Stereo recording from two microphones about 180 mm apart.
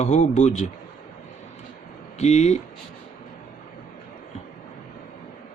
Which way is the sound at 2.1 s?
40° left (ahead or behind).